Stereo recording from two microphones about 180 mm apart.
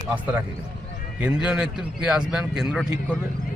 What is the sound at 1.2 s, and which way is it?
A man's voice, 5° right (ahead or behind).